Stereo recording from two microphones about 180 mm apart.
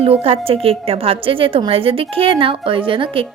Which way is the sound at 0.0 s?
35° right (ahead or behind).